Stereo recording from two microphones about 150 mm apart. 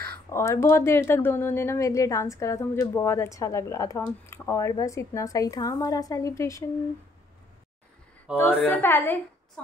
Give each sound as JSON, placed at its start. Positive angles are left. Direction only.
{"t": 0.3, "sound": "speech", "side_deg": 20}
{"t": 8.4, "sound": "a woman's voice", "side_deg": 15}